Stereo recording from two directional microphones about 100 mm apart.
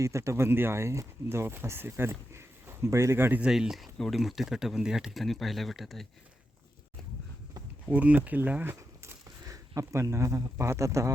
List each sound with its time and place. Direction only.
0.0 s speech: 30° right (ahead or behind)
3.4 s speech: 5° right (ahead or behind)
7.9 s speech: 15° right (ahead or behind); by 11.1 s 30° right (ahead or behind)